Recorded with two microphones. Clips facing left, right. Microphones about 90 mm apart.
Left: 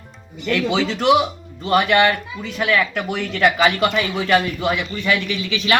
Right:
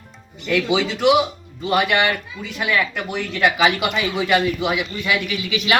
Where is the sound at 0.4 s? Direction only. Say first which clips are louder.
Even; 5° right (ahead or behind).